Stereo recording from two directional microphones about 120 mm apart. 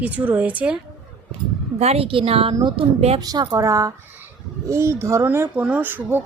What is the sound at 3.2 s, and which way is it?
A woman's voice, 35° right (ahead or behind).